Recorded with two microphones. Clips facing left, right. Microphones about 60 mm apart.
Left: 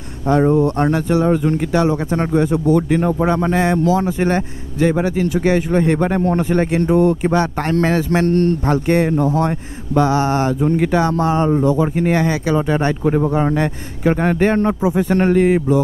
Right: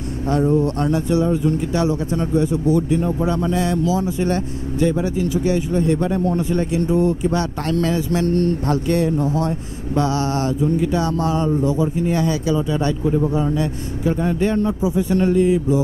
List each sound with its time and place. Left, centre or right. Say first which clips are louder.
0.4 s speech: left 3 dB; left
1.7 s speech: left 3 dB; left
7.2 s speech: left 4 dB; left
10.6 s speech: left 3 dB; left
11.0 s speech: left 4 dB; left